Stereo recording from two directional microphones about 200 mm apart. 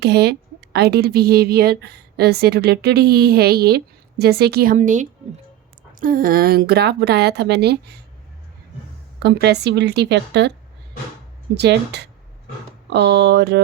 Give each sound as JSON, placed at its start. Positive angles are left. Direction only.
{"t": 0.0, "sound": "a woman's voice", "side_deg": -55}
{"t": 9.2, "sound": "a woman's voice", "side_deg": -55}
{"t": 11.5, "sound": "a woman's voice", "side_deg": -55}